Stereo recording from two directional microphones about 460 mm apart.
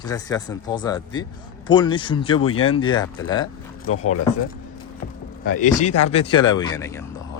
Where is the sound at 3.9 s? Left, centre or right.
Left.